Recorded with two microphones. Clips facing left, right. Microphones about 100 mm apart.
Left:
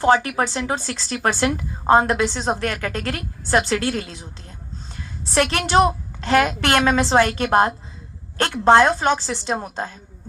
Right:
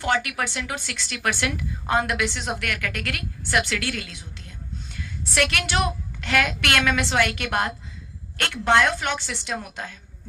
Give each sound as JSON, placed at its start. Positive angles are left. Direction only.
{"t": 0.0, "sound": "a woman's voice", "side_deg": 35}